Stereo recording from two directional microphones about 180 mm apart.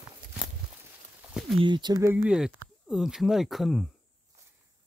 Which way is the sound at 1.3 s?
Centre (ahead or behind).